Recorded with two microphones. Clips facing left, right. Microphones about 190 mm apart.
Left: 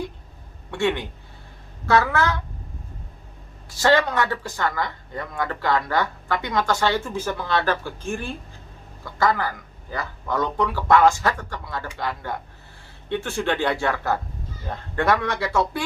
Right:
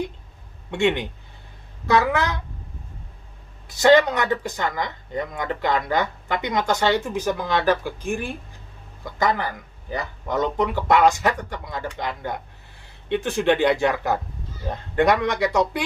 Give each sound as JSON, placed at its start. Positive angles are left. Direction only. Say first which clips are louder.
{"t": 0.7, "sound": "speech", "louder": "right 2 dB", "side_deg": -20}
{"t": 3.8, "sound": "speech", "louder": "right 4 dB", "side_deg": -20}